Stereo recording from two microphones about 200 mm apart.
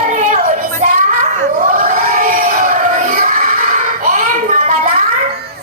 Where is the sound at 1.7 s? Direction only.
40° right (ahead or behind).